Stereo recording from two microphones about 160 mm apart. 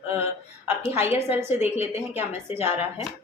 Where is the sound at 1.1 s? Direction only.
15° right (ahead or behind).